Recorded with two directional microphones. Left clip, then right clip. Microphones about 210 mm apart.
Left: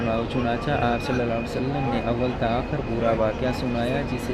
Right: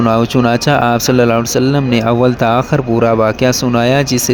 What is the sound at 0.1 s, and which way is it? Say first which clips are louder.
Speech: right 13 dB; 50° right (ahead or behind).